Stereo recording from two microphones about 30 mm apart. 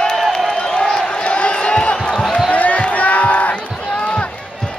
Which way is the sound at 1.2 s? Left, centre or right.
Left.